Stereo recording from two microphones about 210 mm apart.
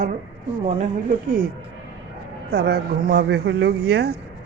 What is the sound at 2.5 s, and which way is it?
Speech, 50° right (ahead or behind).